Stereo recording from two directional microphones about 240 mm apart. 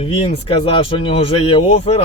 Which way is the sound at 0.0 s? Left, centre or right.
Left.